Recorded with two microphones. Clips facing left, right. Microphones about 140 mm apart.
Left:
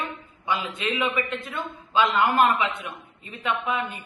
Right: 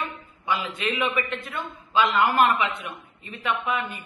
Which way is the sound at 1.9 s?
20° left (ahead or behind).